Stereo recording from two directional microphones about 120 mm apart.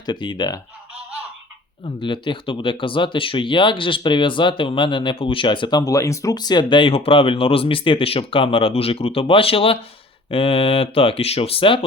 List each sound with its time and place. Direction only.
0.0 s speech: 40° left (ahead or behind)
1.8 s speech: 45° left (ahead or behind)